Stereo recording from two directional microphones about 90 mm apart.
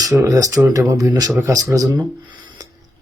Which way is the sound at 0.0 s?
40° right (ahead or behind).